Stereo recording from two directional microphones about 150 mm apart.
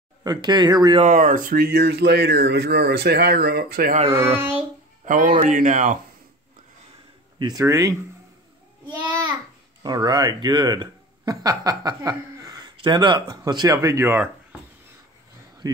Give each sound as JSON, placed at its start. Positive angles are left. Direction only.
{"t": 0.2, "sound": "speech", "side_deg": -25}
{"t": 1.0, "sound": "speech", "side_deg": -60}
{"t": 4.4, "sound": "a child's voice", "side_deg": -15}
{"t": 5.0, "sound": "speech", "side_deg": -65}
{"t": 7.3, "sound": "speech", "side_deg": -25}
{"t": 9.8, "sound": "speech", "side_deg": -25}
{"t": 15.6, "sound": "speech", "side_deg": -25}